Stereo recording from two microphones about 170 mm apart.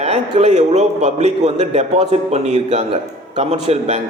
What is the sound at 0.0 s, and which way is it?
A man's voice, 40° right (ahead or behind).